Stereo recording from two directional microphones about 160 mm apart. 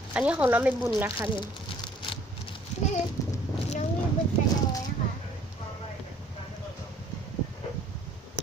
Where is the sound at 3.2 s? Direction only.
20° left (ahead or behind).